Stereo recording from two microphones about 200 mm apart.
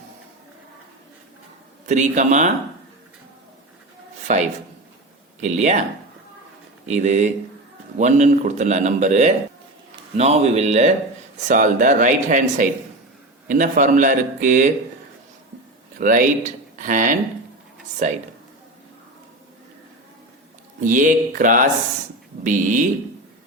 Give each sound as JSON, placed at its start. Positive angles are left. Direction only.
{"t": 1.9, "sound": "speech", "side_deg": -35}
{"t": 5.4, "sound": "speech", "side_deg": -35}
{"t": 6.8, "sound": "speech", "side_deg": -35}
{"t": 16.0, "sound": "speech", "side_deg": -40}
{"t": 20.8, "sound": "speech", "side_deg": -40}